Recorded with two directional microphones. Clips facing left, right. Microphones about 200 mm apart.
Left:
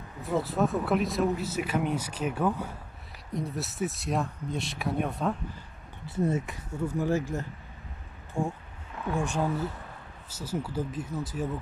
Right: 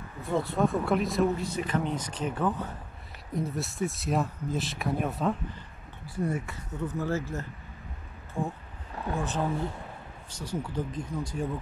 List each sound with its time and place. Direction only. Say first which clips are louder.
0.2 s speech: even; centre (ahead or behind)
6.0 s speech: left 3 dB; 25° left (ahead or behind); by 11.4 s 5° left (ahead or behind)